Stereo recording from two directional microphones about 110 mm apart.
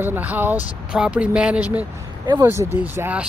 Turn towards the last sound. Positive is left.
turn(degrees=-15)  # may be behind; listen again after turning